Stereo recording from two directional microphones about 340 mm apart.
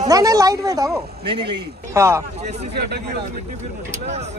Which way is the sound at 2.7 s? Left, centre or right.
Right.